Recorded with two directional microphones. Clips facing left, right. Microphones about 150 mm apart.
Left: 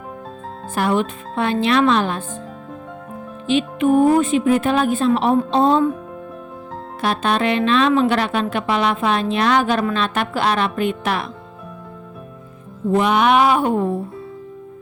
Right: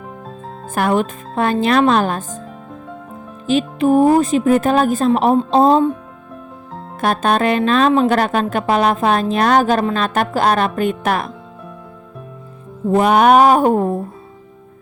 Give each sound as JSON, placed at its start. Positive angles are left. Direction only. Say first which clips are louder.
{"t": 0.7, "sound": "a woman's voice", "louder": "right 2 dB", "side_deg": -50}
{"t": 3.4, "sound": "a woman's voice", "louder": "right 2 dB", "side_deg": -40}
{"t": 7.0, "sound": "a woman's voice", "louder": "right 3 dB", "side_deg": -45}
{"t": 12.9, "sound": "a woman's voice", "louder": "right 4 dB", "side_deg": -45}